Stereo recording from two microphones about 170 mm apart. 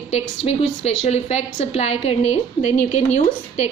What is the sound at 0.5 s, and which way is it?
A woman's voice, 40° left (ahead or behind).